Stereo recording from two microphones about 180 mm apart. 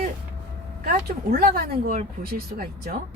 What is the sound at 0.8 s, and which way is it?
Speech, 55° right (ahead or behind).